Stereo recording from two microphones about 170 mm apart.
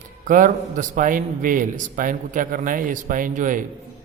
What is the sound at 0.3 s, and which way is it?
A man's voice, 50° right (ahead or behind).